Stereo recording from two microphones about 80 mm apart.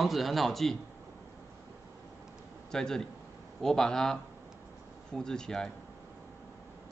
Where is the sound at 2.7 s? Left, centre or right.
Centre.